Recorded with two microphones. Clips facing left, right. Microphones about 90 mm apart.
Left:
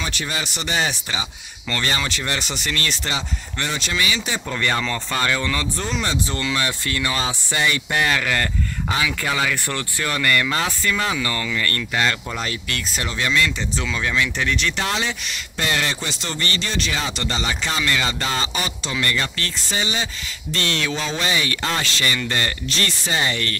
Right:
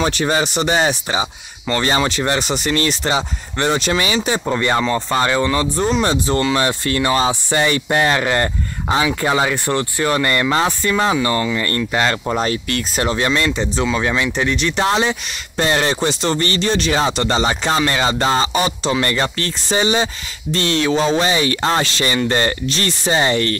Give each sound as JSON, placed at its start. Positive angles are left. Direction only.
{"t": 0.0, "sound": "speech", "side_deg": -40}
{"t": 4.5, "sound": "speech", "side_deg": -25}